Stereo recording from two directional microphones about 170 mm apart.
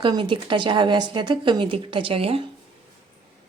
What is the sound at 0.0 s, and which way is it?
Speech, 30° right (ahead or behind).